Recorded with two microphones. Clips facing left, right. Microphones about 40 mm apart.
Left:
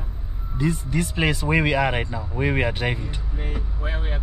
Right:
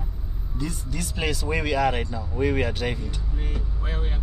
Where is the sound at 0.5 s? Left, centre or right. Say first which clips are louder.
Left 8 dB; left.